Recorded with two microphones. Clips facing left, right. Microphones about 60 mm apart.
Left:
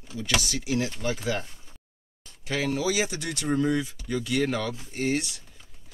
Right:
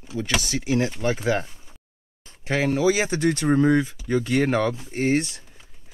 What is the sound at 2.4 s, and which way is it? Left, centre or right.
Speech, right.